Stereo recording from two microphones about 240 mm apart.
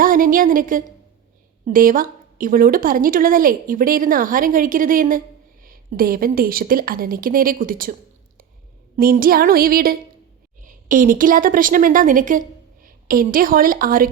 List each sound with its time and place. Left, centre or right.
0.0 s a woman's voice: right
9.0 s a woman's voice: right